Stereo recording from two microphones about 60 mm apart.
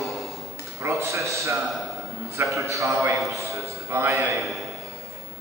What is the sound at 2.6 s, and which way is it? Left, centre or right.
A man's voice, right.